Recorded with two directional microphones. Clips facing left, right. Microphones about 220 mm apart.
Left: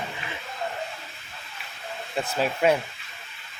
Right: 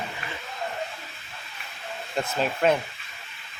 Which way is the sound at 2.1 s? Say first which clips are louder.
Even; 5° left (ahead or behind).